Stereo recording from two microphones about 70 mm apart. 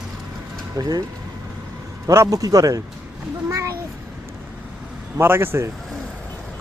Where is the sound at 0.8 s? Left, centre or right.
Right.